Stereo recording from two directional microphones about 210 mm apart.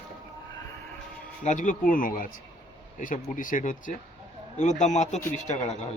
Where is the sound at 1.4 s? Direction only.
35° left (ahead or behind).